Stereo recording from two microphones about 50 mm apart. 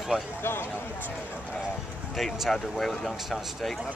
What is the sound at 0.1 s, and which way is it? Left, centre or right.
Speech, right.